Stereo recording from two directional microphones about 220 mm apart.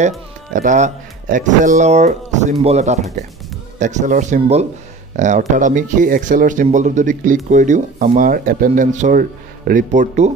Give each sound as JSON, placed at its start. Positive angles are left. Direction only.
{"t": 0.5, "sound": "speech", "side_deg": -35}